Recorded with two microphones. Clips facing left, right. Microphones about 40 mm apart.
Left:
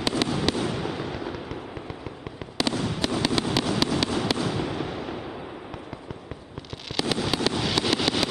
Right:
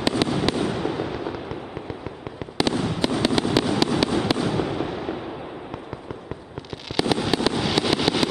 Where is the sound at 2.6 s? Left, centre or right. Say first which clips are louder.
Right 4 dB; centre.